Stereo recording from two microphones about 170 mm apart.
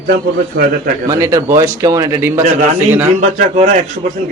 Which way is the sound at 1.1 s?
15° right (ahead or behind).